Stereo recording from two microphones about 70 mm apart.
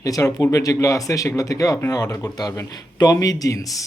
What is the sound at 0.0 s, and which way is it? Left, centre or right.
Speech, left.